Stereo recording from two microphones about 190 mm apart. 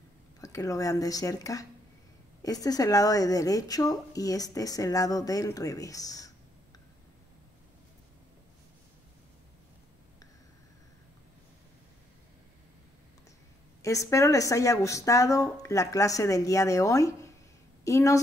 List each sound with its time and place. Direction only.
0.4 s speech: 15° left (ahead or behind)
13.8 s speech: 15° left (ahead or behind)